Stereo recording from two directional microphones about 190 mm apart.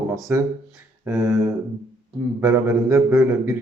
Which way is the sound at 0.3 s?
10° right (ahead or behind).